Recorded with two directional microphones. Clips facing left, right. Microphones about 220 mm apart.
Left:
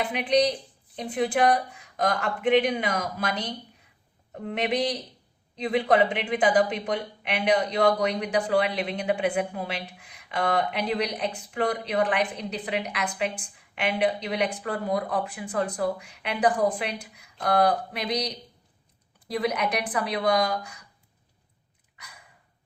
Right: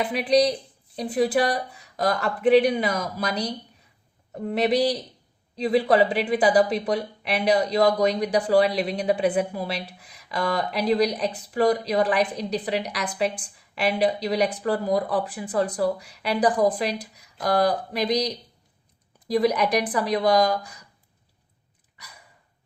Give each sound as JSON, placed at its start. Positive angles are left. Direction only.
{"t": 0.9, "sound": "a woman's voice", "side_deg": -40}
{"t": 19.3, "sound": "a woman's voice", "side_deg": -35}